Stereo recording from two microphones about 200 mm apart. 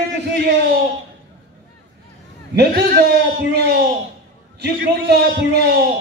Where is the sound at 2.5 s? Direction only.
55° right (ahead or behind).